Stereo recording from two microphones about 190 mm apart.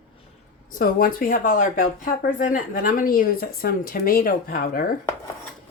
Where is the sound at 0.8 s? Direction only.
50° left (ahead or behind).